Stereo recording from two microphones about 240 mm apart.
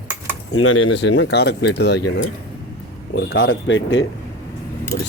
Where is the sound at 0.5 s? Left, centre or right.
Left.